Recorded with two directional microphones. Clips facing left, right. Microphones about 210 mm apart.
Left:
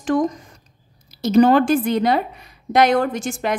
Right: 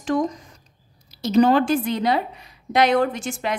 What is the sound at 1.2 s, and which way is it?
Speech, 50° left (ahead or behind).